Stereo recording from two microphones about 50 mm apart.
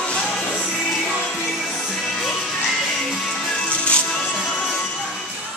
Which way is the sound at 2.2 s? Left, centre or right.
Centre.